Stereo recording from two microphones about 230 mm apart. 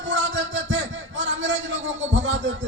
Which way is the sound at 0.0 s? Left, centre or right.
Right.